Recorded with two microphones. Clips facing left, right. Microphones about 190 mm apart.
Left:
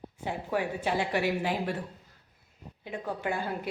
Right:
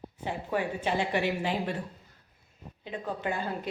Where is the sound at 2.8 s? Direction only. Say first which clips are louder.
Even; 10° left (ahead or behind).